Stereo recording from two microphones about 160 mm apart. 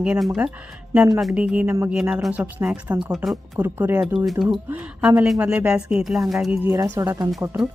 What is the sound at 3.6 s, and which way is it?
Speech, 15° right (ahead or behind).